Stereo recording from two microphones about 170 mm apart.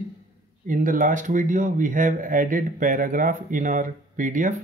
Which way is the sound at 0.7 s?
50° right (ahead or behind).